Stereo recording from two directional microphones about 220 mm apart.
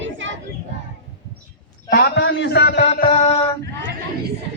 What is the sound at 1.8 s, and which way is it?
A man's voice, 50° left (ahead or behind).